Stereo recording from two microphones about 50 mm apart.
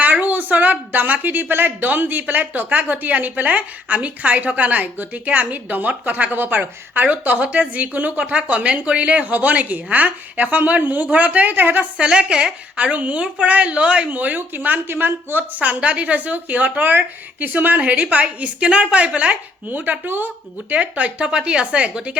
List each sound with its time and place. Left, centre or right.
0.0 s a woman's voice: right
11.9 s a woman's voice: centre; by 17.7 s right
17.7 s a woman's voice: right
20.7 s a woman's voice: right